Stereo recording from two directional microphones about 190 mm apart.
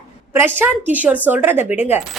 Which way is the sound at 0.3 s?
10° right (ahead or behind).